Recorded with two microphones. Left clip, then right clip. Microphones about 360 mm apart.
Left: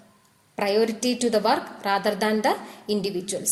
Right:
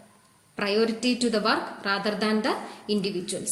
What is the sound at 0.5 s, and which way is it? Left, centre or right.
A woman's voice, centre.